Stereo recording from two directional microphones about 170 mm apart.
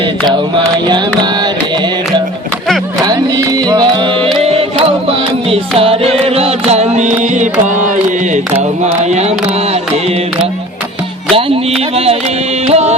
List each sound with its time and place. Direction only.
0.9 s music: 25° right (ahead or behind)
3.0 s music: 20° right (ahead or behind)
4.4 s music: 35° right (ahead or behind)
8.8 s a sound: 40° right (ahead or behind)
12.6 s music: 40° right (ahead or behind)